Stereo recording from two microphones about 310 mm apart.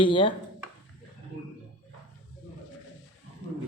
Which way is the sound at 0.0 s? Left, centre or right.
Centre.